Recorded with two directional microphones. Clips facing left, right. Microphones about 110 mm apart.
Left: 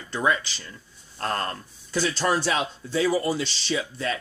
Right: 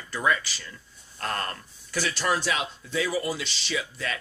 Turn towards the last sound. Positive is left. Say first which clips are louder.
# left 4 dB
turn(degrees=30)  # may be behind; listen again after turning